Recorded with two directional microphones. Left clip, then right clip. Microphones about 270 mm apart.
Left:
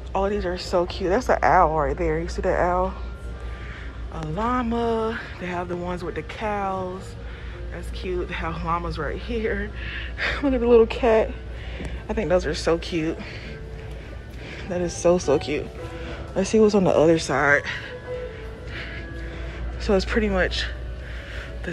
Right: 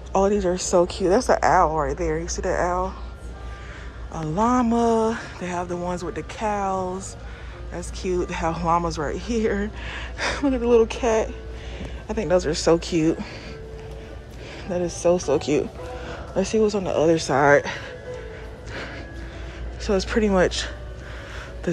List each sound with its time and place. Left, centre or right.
0.1 s a woman's voice: right
1.7 s a woman's voice: centre
2.5 s a woman's voice: centre
4.1 s a woman's voice: centre
14.7 s a woman's voice: centre; by 17.7 s right
19.8 s speech: centre